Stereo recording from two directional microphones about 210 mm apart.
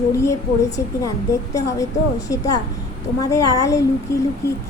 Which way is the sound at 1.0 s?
15° left (ahead or behind).